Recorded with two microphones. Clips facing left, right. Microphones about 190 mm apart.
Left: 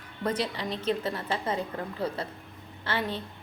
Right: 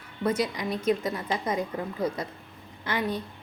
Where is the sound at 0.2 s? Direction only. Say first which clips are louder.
Right 3 dB; 10° right (ahead or behind).